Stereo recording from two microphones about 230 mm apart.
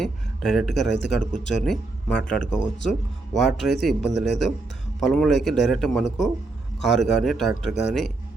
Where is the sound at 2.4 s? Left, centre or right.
Left.